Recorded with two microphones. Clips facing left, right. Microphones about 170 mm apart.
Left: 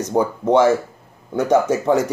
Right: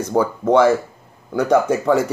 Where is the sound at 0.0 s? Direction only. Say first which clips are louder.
Right 1 dB; 20° left (ahead or behind).